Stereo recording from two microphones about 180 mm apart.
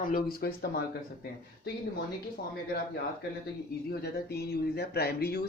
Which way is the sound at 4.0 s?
65° left (ahead or behind).